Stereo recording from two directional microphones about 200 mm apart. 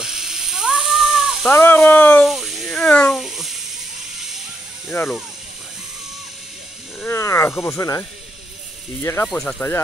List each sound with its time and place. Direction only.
0.0 s cat: centre (ahead or behind)
1.5 s a sound: 10° left (ahead or behind)
4.9 s speech: 15° left (ahead or behind)
7.0 s speech: 15° left (ahead or behind)
9.0 s speech: 10° left (ahead or behind)